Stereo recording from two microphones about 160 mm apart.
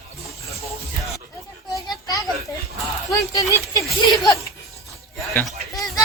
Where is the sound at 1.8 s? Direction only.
25° left (ahead or behind).